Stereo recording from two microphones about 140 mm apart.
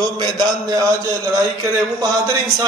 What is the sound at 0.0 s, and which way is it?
A man's voice, 30° right (ahead or behind).